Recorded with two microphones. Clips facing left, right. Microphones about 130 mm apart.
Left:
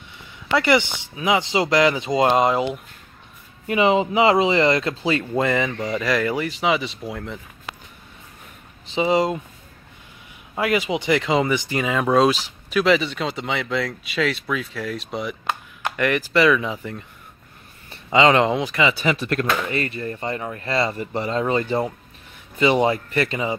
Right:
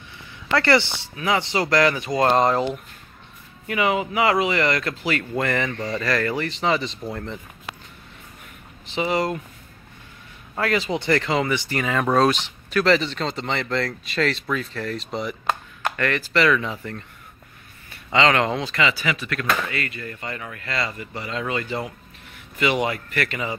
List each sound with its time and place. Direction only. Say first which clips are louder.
0.5 s speech: left 1 dB; 15° left (ahead or behind)
3.6 s speech: left 4 dB; 25° left (ahead or behind); by 7.3 s 5° left (ahead or behind)
8.9 s speech: left 4 dB; 20° left (ahead or behind)
10.5 s speech: left 2 dB; 10° left (ahead or behind)
15.8 s speech: left 7 dB; 15° left (ahead or behind)
18.1 s speech: left 3 dB; 20° left (ahead or behind)